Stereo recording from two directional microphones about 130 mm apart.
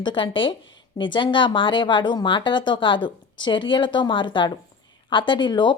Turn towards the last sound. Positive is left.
turn(degrees=35)  # may be behind; listen again after turning